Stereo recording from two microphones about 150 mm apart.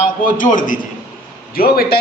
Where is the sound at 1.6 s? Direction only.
85° left.